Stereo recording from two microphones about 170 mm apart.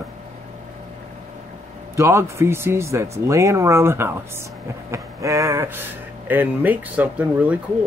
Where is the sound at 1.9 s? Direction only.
15° right (ahead or behind).